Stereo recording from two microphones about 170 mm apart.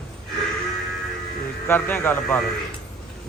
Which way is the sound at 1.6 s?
10° left (ahead or behind).